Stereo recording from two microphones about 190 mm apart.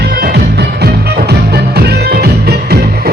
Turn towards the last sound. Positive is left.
turn(degrees=-55)  # may be behind; listen again after turning